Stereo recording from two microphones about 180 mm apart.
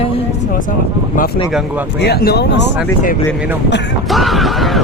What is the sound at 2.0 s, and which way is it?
Speech, 60° left (ahead or behind).